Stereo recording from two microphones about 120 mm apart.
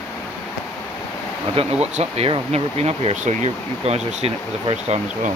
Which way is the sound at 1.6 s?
60° right (ahead or behind).